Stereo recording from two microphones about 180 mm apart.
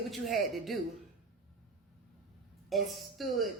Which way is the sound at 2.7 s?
Centre (ahead or behind).